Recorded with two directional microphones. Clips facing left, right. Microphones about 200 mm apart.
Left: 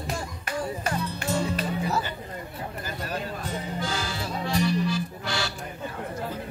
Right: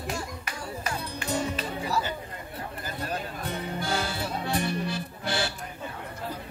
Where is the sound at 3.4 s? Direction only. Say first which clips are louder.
Right 4 dB; 60° right (ahead or behind).